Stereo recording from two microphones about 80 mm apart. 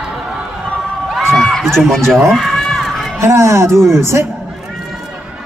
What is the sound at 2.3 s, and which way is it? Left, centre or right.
Crowd, centre.